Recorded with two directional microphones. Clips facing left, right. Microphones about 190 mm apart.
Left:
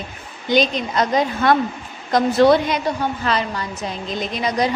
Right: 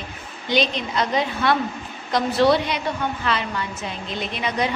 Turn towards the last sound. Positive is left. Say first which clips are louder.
# left 4 dB
turn(degrees=40)  # may be behind; listen again after turning